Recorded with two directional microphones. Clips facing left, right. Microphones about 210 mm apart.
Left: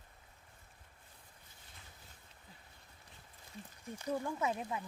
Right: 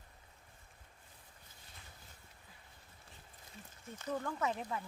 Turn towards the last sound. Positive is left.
turn(degrees=10)  # may be behind; listen again after turning